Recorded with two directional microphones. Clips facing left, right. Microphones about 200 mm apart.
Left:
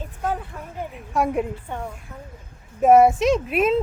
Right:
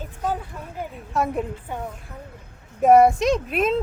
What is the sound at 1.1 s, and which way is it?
Speech, 10° left (ahead or behind).